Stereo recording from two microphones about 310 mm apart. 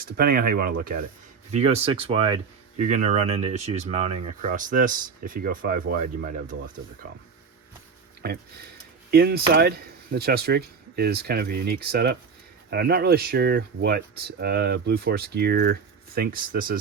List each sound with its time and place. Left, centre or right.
0.0 s speech: right
8.2 s speech: right